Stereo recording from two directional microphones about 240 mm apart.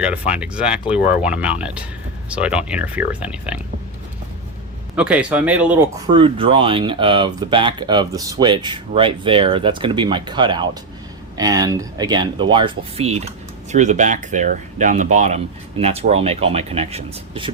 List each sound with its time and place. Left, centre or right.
0.0 s speech: centre
4.9 s speech: centre
6.1 s speech: right